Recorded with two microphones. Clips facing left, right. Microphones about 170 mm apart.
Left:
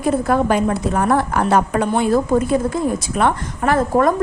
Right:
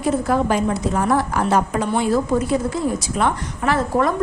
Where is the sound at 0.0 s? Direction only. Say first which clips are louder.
Left 2 dB; 55° left (ahead or behind).